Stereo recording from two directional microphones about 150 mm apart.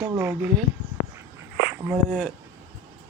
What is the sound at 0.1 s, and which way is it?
Speech, 15° right (ahead or behind).